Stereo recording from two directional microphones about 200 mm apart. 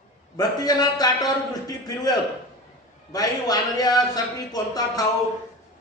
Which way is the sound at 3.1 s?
20° left (ahead or behind).